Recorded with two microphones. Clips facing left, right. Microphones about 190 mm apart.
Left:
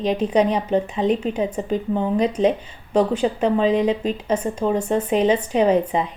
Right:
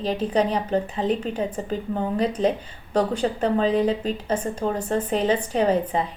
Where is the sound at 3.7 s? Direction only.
35° right (ahead or behind).